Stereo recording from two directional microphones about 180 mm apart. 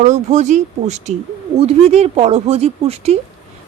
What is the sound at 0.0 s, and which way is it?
A woman's voice, 40° right (ahead or behind).